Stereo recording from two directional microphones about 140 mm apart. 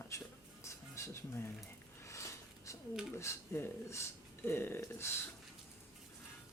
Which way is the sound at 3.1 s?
20° left (ahead or behind).